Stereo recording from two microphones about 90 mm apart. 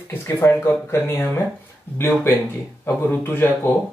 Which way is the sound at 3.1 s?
25° left (ahead or behind).